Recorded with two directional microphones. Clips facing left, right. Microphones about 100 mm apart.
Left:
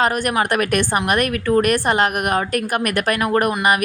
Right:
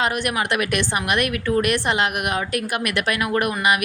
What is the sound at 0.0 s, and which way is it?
A woman's voice, 40° left (ahead or behind).